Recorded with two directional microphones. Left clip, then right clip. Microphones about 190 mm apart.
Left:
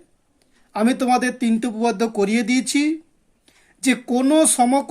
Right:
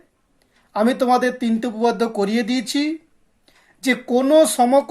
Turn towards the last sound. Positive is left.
turn(degrees=25)  # may be behind; listen again after turning